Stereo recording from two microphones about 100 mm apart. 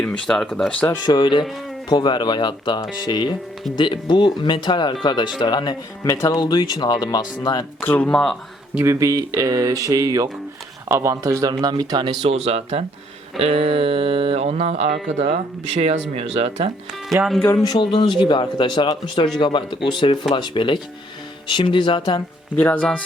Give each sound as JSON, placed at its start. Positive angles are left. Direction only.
{"t": 0.0, "sound": "speech", "side_deg": 10}
{"t": 1.0, "sound": "speech", "side_deg": 50}
{"t": 6.1, "sound": "speech", "side_deg": 30}
{"t": 6.4, "sound": "speech", "side_deg": 50}
{"t": 7.8, "sound": "speech", "side_deg": 20}
{"t": 8.1, "sound": "speech", "side_deg": 5}
{"t": 8.8, "sound": "speech", "side_deg": -30}
{"t": 12.3, "sound": "speech", "side_deg": -90}
{"t": 17.2, "sound": "speech", "side_deg": -25}
{"t": 17.7, "sound": "speech", "side_deg": 55}
{"t": 22.5, "sound": "speech", "side_deg": 20}